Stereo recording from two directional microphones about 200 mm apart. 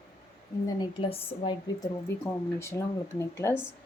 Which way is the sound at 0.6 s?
25° left (ahead or behind).